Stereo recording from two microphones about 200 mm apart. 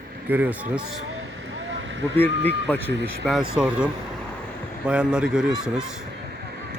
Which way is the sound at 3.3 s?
Centre (ahead or behind).